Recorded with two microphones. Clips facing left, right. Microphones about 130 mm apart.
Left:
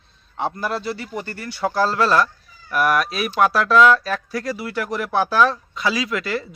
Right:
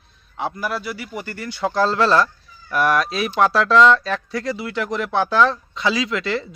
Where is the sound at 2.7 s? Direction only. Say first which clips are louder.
Right 1 dB; 25° right (ahead or behind).